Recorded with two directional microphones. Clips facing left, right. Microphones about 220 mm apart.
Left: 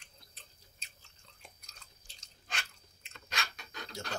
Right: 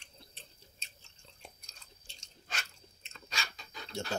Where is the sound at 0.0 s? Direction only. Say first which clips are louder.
Right 4 dB; 25° right (ahead or behind).